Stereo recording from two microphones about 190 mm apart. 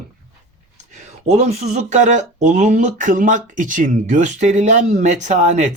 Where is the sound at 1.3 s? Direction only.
35° right (ahead or behind).